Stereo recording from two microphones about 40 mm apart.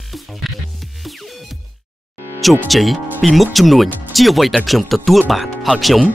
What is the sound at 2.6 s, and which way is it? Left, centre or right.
Speech, centre.